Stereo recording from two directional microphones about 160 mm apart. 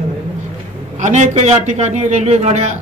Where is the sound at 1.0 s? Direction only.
50° right (ahead or behind).